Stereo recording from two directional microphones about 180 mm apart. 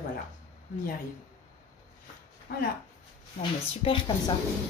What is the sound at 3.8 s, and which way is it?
Speech, 25° left (ahead or behind).